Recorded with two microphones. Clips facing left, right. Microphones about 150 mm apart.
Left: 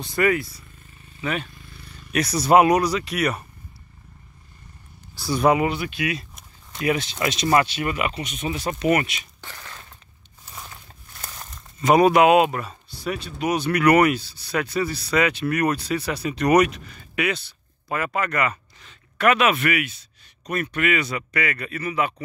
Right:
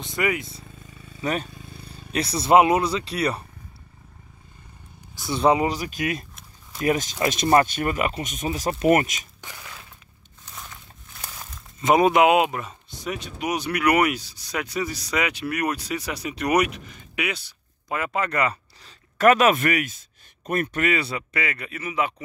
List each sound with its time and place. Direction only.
0.0 s speech: 20° right (ahead or behind)
1.2 s speech: 40° right (ahead or behind)
5.1 s speech: 20° right (ahead or behind); by 9.3 s 40° right (ahead or behind)
9.4 s a sound: 10° right (ahead or behind)
10.4 s a sound: 10° left (ahead or behind)
11.1 s crumpling: centre (ahead or behind)
11.8 s speech: 20° right (ahead or behind)